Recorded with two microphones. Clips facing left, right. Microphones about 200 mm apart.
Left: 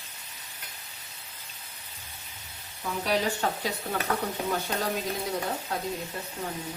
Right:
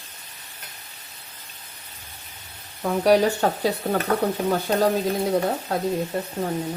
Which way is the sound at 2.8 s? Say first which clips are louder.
Right 10 dB; 50° right (ahead or behind).